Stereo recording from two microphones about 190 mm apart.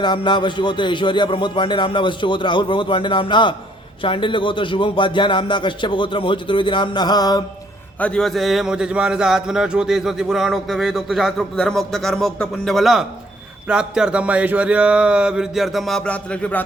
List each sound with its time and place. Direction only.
0.0 s speech: 25° left (ahead or behind)
7.9 s a man's voice: 5° left (ahead or behind)